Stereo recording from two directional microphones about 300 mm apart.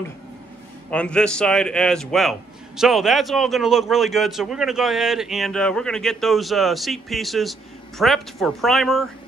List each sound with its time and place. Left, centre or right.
0.8 s a man's voice: centre